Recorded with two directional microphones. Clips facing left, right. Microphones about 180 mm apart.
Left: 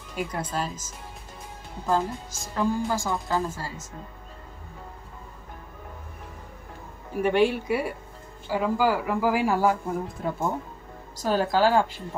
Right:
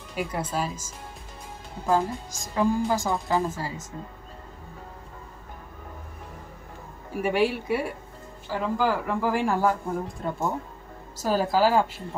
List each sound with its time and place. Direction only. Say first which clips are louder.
0.1 s a woman's voice: right 1 dB; 5° right (ahead or behind)
7.1 s speech: left 2 dB; 5° right (ahead or behind)